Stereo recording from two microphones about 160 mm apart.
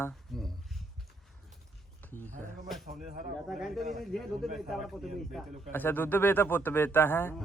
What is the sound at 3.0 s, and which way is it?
Speech, 55° right (ahead or behind).